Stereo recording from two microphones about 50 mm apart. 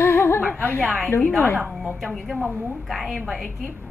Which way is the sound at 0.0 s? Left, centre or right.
Left.